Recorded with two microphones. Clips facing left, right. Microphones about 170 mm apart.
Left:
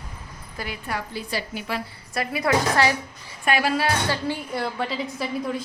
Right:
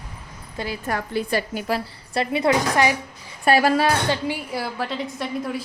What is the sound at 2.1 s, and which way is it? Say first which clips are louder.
Speech: right 3 dB; 25° right (ahead or behind).